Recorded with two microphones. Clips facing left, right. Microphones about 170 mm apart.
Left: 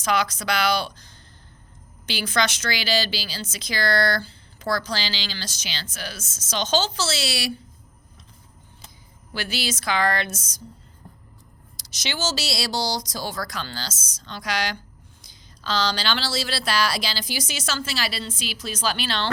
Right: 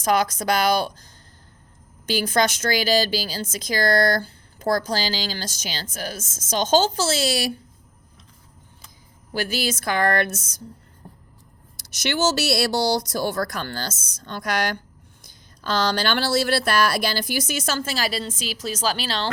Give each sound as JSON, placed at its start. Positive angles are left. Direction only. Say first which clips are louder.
{"t": 0.0, "sound": "a woman's voice", "louder": "right 3 dB", "side_deg": -45}
{"t": 9.3, "sound": "a woman's voice", "louder": "right 4 dB", "side_deg": -45}
{"t": 11.0, "sound": "a sound", "louder": "right 3 dB", "side_deg": -20}
{"t": 11.8, "sound": "a woman's voice", "louder": "right 6 dB", "side_deg": -60}